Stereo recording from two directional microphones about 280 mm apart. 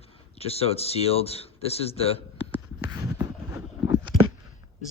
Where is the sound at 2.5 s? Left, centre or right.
Centre.